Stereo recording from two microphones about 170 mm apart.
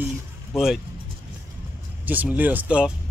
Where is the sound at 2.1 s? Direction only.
10° right (ahead or behind).